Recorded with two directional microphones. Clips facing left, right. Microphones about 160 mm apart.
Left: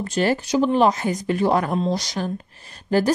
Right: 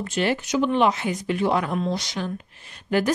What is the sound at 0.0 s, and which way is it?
A woman's voice, 40° left (ahead or behind).